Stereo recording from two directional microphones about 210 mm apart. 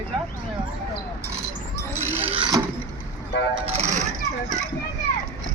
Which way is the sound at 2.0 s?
10° right (ahead or behind).